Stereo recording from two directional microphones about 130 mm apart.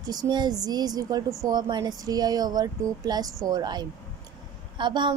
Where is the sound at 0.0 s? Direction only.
30° right (ahead or behind).